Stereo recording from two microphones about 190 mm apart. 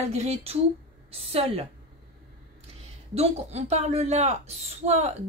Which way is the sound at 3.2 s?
35° right (ahead or behind).